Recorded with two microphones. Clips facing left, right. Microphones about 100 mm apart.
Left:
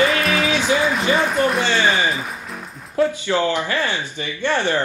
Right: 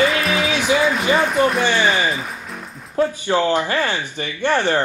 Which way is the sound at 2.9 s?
20° right (ahead or behind).